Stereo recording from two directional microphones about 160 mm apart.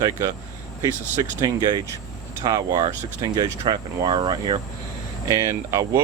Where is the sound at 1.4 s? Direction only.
25° right (ahead or behind).